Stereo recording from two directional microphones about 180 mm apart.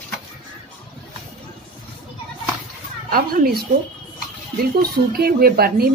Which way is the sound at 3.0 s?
50° right (ahead or behind).